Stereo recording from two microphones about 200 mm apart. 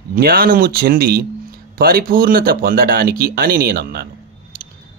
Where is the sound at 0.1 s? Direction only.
50° right (ahead or behind).